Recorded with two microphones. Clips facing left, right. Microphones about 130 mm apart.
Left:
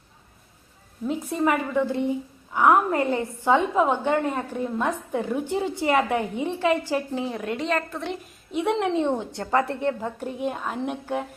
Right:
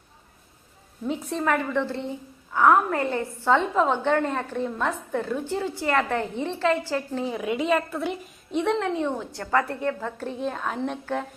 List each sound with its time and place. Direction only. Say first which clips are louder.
1.0 s a woman's voice: left 2 dB; 5° left (ahead or behind)
7.3 s a woman's voice: right 3 dB; 5° right (ahead or behind)
8.6 s a woman's voice: left 1 dB; 10° left (ahead or behind)
9.0 s a woman's voice: left 3 dB; 25° left (ahead or behind)